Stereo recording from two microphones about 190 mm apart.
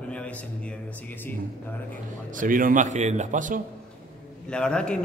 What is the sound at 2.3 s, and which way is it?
A man's voice, 45° right (ahead or behind).